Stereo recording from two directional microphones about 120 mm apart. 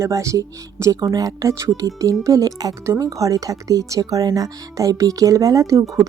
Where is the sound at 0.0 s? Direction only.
25° right (ahead or behind).